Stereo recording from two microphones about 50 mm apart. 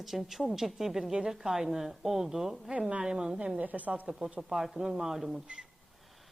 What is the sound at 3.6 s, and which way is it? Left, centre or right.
Speech, right.